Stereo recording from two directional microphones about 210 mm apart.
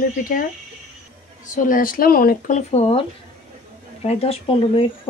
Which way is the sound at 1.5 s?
40° left (ahead or behind).